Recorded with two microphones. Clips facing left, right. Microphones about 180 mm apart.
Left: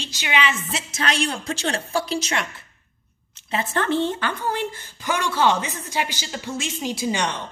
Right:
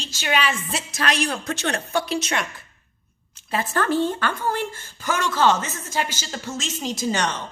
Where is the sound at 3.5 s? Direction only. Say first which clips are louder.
Even; 25° left (ahead or behind).